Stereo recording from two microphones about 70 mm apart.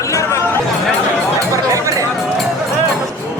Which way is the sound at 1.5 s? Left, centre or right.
Right.